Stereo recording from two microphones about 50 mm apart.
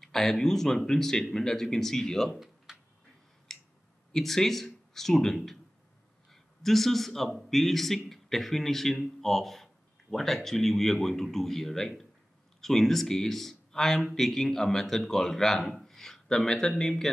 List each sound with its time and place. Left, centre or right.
0.0 s speech: centre
3.5 s a sound: centre
4.1 s a man's voice: centre